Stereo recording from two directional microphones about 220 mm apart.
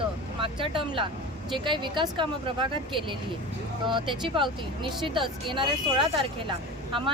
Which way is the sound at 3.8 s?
20° right (ahead or behind).